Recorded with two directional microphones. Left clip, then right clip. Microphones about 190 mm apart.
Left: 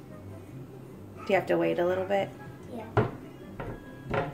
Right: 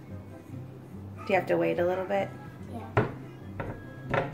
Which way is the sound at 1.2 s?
5° left (ahead or behind).